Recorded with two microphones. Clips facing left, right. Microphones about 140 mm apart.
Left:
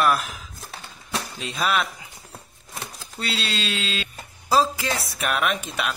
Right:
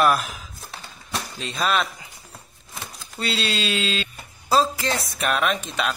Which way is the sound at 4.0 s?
10° left (ahead or behind).